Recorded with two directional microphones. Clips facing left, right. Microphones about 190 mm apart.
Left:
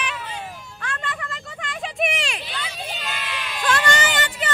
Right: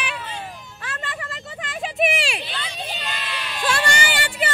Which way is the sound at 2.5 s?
5° left (ahead or behind).